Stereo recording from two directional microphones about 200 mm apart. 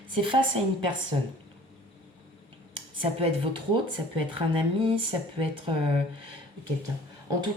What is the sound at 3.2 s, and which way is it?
Speech, 25° right (ahead or behind).